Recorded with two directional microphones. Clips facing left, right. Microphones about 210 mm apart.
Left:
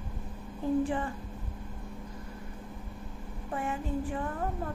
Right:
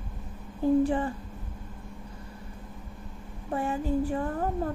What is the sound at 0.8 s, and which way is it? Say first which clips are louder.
Speech: right 5 dB; 35° right (ahead or behind).